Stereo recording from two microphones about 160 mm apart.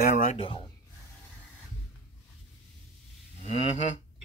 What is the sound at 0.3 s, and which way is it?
Speech, 35° left (ahead or behind).